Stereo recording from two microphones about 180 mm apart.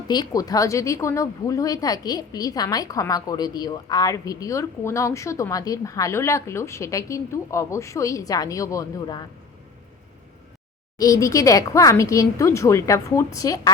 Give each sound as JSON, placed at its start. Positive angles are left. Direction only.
{"t": 0.1, "sound": "a woman's voice", "side_deg": 20}
{"t": 10.9, "sound": "speech", "side_deg": 20}